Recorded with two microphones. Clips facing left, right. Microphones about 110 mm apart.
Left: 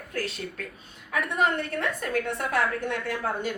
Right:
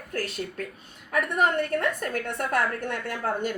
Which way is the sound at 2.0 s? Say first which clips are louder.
Left 1 dB; 50° right (ahead or behind).